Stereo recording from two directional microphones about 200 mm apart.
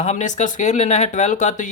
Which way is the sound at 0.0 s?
35° left (ahead or behind).